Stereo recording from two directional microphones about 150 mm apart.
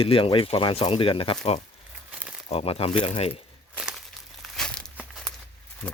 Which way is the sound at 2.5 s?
40° left (ahead or behind).